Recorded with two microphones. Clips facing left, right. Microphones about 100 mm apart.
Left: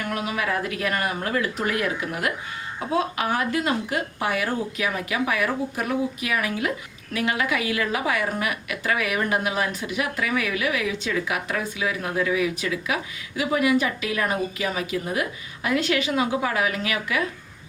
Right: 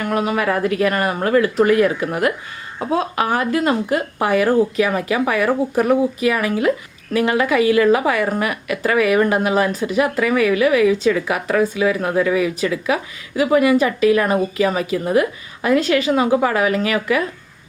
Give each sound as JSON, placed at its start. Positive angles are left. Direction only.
{"t": 0.1, "sound": "speech", "side_deg": -45}
{"t": 5.5, "sound": "speech", "side_deg": -70}
{"t": 6.1, "sound": "a woman's voice", "side_deg": -40}